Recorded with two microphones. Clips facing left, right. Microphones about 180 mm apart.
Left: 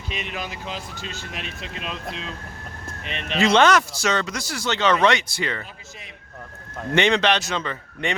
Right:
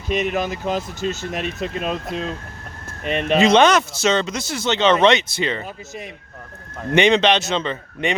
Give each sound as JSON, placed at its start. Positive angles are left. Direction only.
{"t": 0.1, "sound": "speech", "side_deg": -45}
{"t": 3.3, "sound": "speech", "side_deg": -20}
{"t": 6.9, "sound": "speech", "side_deg": -20}